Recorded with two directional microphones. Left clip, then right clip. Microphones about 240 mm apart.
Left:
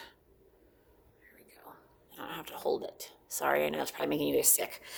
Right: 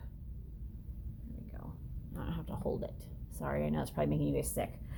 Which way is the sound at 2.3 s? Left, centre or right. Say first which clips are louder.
Left 6 dB; left.